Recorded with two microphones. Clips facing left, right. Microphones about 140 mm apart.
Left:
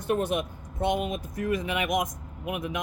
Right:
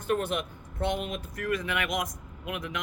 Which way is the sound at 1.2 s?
65° right (ahead or behind).